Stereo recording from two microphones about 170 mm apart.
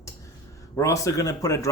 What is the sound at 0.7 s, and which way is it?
Speech, 20° left (ahead or behind).